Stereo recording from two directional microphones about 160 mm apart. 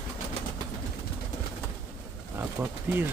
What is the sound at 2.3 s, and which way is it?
Speech, 15° right (ahead or behind).